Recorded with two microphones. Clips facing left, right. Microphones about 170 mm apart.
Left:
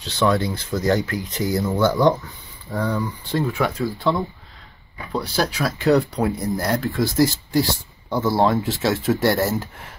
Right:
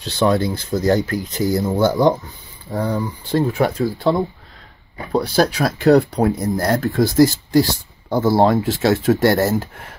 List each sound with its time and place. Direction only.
0.2 s speech: 30° right (ahead or behind)
8.1 s speech: 40° right (ahead or behind)